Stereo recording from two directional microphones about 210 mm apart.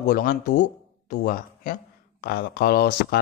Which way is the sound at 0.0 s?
40° left (ahead or behind).